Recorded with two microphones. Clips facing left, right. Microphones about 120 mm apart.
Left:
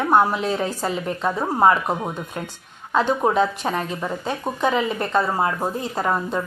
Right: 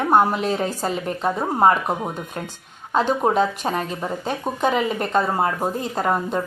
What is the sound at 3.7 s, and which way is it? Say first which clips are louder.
A woman's voice: even; 25° right (ahead or behind).